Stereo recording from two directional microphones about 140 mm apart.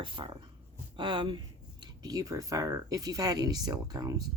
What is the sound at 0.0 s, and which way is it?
Speech, 35° right (ahead or behind).